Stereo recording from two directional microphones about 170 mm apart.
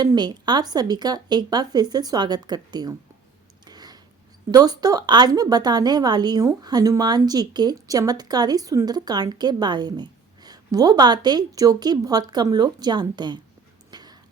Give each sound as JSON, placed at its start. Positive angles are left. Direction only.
{"t": 0.0, "sound": "a woman's voice", "side_deg": -25}
{"t": 3.7, "sound": "a sound", "side_deg": -25}
{"t": 4.5, "sound": "a woman's voice", "side_deg": -25}
{"t": 13.9, "sound": "dog", "side_deg": -25}